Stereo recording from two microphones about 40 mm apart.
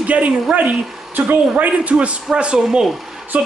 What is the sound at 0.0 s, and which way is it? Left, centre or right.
Speech, right.